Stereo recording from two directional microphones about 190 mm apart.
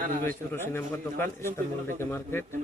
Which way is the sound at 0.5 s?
10° left (ahead or behind).